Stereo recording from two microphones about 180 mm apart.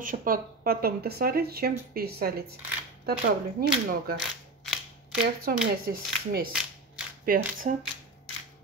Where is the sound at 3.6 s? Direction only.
55° right (ahead or behind).